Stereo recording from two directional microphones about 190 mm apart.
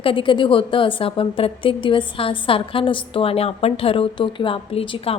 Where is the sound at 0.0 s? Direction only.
25° left (ahead or behind).